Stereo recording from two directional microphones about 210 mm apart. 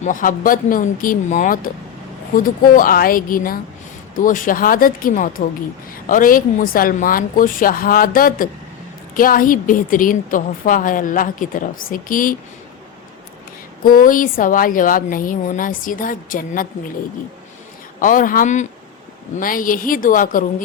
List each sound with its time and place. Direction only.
0.0 s a woman's voice: 40° left (ahead or behind)
13.8 s a woman's voice: 40° left (ahead or behind)
18.0 s a woman's voice: 40° left (ahead or behind)